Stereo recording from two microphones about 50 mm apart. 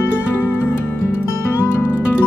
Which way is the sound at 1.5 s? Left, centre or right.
Left.